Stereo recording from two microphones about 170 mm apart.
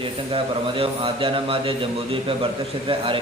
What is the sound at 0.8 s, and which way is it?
Speech, 30° right (ahead or behind).